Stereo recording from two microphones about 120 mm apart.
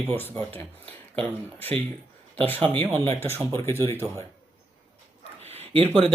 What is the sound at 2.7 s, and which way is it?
Speech, 50° right (ahead or behind).